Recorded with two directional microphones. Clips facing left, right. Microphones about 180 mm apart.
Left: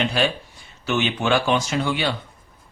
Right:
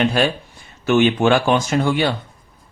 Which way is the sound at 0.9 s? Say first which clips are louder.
Right 7 dB; 50° right (ahead or behind).